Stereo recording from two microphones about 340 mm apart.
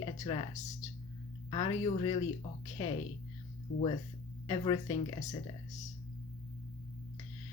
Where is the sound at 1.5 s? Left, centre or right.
Centre.